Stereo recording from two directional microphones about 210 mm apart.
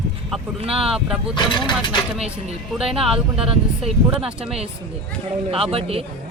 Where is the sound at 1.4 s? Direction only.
20° left (ahead or behind).